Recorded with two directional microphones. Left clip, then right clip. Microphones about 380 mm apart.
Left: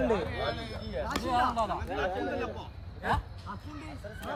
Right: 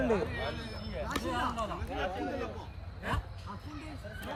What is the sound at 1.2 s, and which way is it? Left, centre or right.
Speech, left.